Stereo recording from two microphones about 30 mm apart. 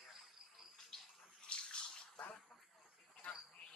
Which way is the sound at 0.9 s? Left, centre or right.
Centre.